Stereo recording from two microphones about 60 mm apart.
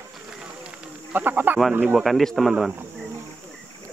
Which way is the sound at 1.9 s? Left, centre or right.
Centre.